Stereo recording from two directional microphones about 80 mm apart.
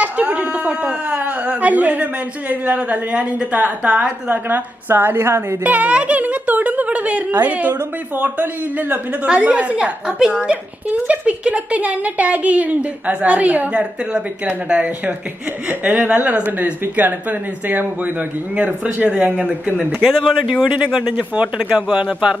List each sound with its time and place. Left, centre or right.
0.0 s a sound: centre
2.5 s a woman's voice: centre
4.3 s speech: right
5.6 s a woman's voice: centre
20.0 s speech: centre
20.6 s a woman's voice: centre